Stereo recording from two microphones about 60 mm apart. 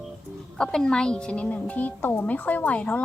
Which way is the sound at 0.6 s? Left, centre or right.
Centre.